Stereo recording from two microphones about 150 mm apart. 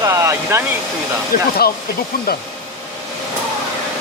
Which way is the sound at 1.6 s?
90° left.